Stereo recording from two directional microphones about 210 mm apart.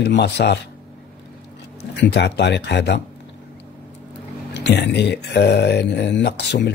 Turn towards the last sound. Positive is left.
turn(degrees=55)  # may be behind; listen again after turning